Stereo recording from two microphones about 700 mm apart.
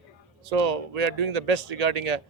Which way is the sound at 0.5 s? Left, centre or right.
Right.